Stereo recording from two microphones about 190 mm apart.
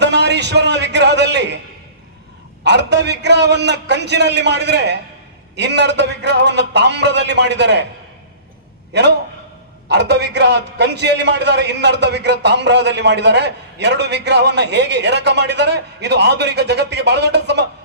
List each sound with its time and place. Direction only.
0.0 s a sound: 65° right (ahead or behind)
2.6 s a man's voice: 65° right (ahead or behind)
8.9 s a man's voice: 65° right (ahead or behind)